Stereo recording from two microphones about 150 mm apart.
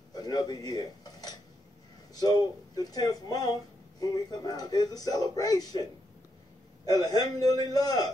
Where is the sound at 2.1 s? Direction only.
25° left (ahead or behind).